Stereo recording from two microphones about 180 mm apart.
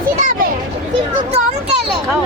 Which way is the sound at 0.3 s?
50° right (ahead or behind).